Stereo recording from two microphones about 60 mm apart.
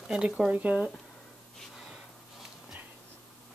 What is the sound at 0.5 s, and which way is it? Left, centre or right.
Speech, right.